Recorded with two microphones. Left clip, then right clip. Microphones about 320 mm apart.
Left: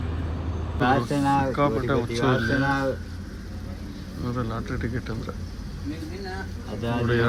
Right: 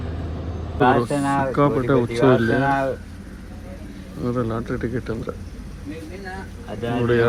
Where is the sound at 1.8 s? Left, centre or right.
Right.